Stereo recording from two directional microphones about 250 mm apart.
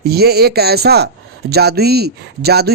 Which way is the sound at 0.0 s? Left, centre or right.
Right.